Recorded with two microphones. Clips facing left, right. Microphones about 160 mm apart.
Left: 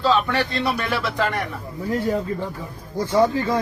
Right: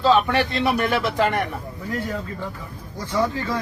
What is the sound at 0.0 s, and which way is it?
Speech, 20° right (ahead or behind).